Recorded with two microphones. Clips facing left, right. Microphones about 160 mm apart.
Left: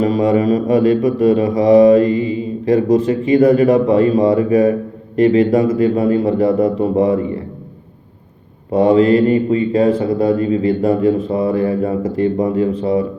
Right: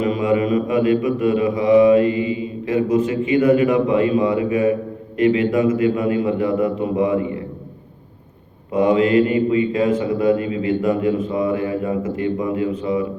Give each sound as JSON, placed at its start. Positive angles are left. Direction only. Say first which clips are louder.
{"t": 0.0, "sound": "a man's voice", "louder": "left 4 dB", "side_deg": 35}
{"t": 8.7, "sound": "a man's voice", "louder": "left 4 dB", "side_deg": 35}